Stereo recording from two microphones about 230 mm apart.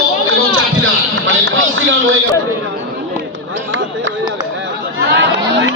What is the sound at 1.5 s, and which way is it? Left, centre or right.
Speech, right.